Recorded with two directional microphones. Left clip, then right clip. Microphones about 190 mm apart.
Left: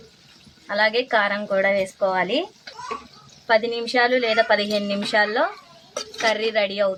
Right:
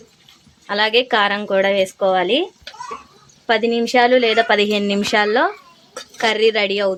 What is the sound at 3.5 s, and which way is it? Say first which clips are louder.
Speech: right 3 dB; 60° right (ahead or behind).